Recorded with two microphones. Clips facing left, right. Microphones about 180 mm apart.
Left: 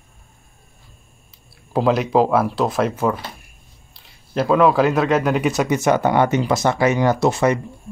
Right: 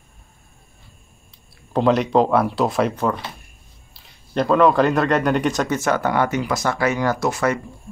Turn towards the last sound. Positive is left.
turn(degrees=25)  # may be behind; listen again after turning